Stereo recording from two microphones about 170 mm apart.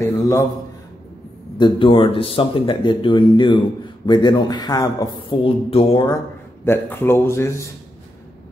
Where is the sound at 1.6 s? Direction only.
30° left (ahead or behind).